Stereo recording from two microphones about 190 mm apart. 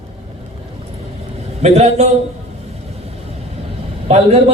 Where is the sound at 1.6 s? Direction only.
35° right (ahead or behind).